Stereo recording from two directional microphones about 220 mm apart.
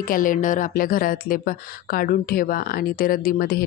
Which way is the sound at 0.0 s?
40° left (ahead or behind).